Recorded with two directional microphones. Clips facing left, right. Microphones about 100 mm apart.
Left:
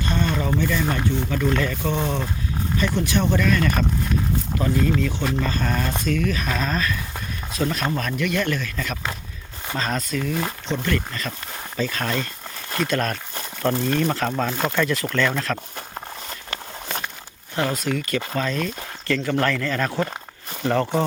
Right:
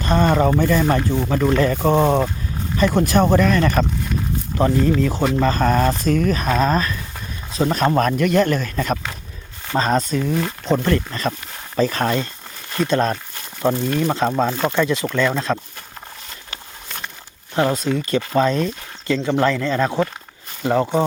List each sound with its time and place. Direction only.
0.0 s speech: 40° right (ahead or behind)
4.9 s speech: 35° right (ahead or behind)
13.6 s speech: 15° right (ahead or behind)
17.5 s speech: 25° right (ahead or behind)